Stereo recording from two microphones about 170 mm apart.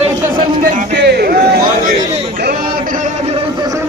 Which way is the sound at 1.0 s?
70° right (ahead or behind).